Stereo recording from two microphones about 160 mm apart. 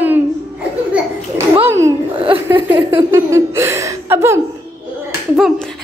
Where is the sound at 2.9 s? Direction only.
15° right (ahead or behind).